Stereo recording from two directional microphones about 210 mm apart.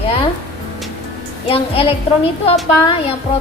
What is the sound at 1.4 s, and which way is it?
Speech, 25° left (ahead or behind).